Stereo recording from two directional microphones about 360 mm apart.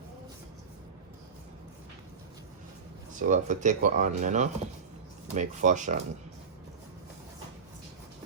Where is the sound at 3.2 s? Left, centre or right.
Right.